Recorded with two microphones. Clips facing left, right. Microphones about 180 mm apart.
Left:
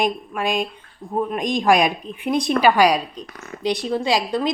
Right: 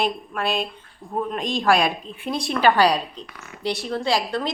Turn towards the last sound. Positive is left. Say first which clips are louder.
# left 3 dB
turn(degrees=15)  # may be behind; listen again after turning